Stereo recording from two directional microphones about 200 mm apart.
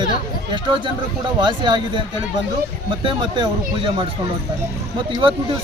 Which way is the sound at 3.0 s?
25° right (ahead or behind).